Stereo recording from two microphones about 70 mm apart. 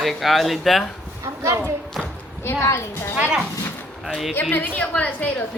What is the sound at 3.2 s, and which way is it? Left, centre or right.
Speech, centre.